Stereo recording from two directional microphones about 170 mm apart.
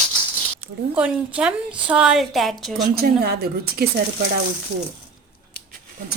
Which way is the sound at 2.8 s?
65° right (ahead or behind).